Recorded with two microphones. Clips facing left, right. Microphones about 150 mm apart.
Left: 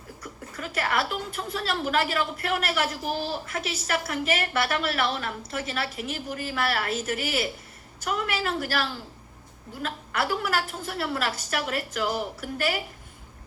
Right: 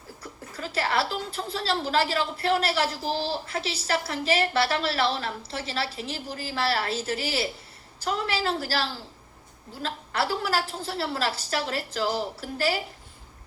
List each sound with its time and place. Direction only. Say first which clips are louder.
0.2 s a woman's voice: even; 30° right (ahead or behind)